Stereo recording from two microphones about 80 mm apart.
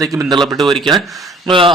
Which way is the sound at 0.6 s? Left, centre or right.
Centre.